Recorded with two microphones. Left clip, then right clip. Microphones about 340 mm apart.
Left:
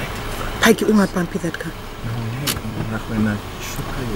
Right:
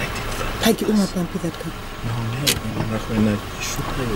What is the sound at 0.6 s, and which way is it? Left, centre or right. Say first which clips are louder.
Speech: left 5 dB; centre.